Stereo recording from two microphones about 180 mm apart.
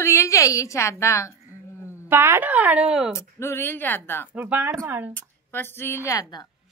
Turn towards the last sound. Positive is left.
turn(degrees=20)  # may be behind; listen again after turning